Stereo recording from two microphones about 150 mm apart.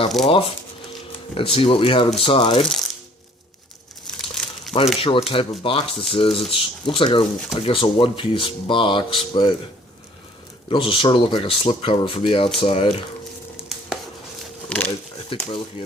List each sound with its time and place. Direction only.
0.3 s speech: 40° left (ahead or behind)
4.0 s crumpling: 5° left (ahead or behind)
4.9 s speech: 40° left (ahead or behind)
10.7 s speech: 35° left (ahead or behind)
13.6 s a sound: 5° right (ahead or behind)
15.3 s speech: 35° left (ahead or behind)